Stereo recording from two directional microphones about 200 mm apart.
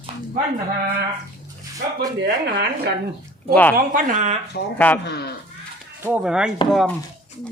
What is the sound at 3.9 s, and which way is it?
Speech, 40° right (ahead or behind).